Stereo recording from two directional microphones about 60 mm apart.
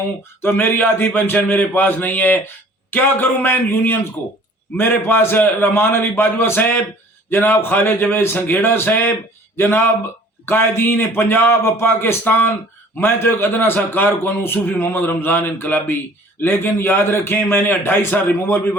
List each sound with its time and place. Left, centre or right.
0.4 s a man's voice: left